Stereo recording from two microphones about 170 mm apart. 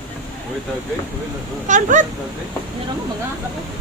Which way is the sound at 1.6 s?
45° right (ahead or behind).